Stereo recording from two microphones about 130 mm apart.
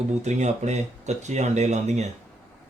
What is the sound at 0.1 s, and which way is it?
Speech, 65° right (ahead or behind).